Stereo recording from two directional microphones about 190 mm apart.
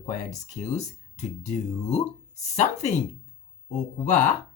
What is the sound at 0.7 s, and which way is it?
Speech, 35° left (ahead or behind).